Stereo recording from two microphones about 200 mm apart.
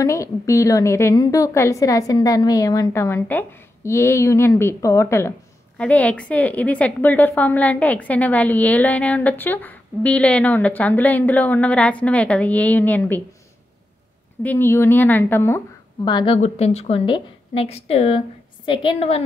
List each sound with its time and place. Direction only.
0.0 s a woman's voice: 15° left (ahead or behind)
14.4 s a woman's voice: 10° left (ahead or behind)
16.3 s a woman's voice: 30° left (ahead or behind)